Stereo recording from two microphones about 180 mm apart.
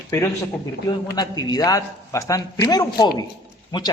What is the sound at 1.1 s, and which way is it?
A man's voice, 20° left (ahead or behind).